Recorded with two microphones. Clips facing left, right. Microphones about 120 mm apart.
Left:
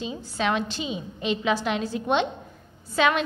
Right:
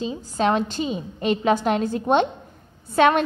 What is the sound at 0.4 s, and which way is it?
A woman's voice, 40° right (ahead or behind).